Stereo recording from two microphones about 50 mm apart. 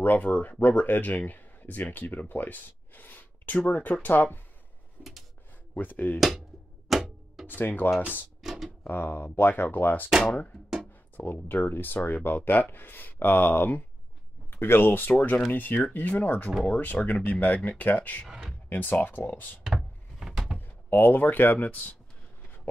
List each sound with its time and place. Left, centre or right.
0.0 s speech: left
5.0 s a sound: left
5.8 s speech: left
6.1 s speech: centre
6.9 s music: centre
7.4 s speech: left
8.4 s a sound: centre
8.8 s speech: left
10.2 s speech: centre
11.4 s speech: left
19.6 s a sound: centre
20.5 s speech: left